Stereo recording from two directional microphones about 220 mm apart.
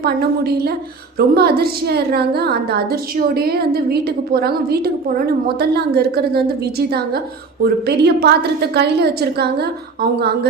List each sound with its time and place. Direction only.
0.0 s a woman's voice: 45° right (ahead or behind)